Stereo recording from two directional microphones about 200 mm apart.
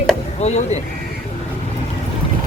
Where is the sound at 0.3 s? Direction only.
35° left (ahead or behind).